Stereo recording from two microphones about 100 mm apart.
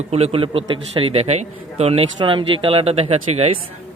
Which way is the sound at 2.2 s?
60° right (ahead or behind).